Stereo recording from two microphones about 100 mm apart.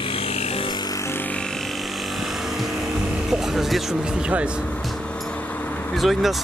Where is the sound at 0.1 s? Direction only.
70° left (ahead or behind).